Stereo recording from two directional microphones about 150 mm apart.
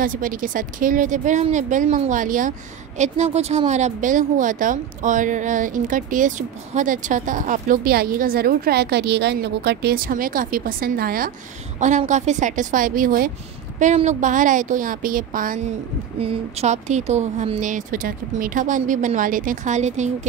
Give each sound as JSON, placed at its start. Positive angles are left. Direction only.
{"t": 0.0, "sound": "a woman's voice", "side_deg": -65}
{"t": 3.0, "sound": "a woman's voice", "side_deg": -50}
{"t": 12.1, "sound": "a woman's voice", "side_deg": -50}
{"t": 13.7, "sound": "a woman's voice", "side_deg": -50}
{"t": 16.2, "sound": "a woman's voice", "side_deg": -40}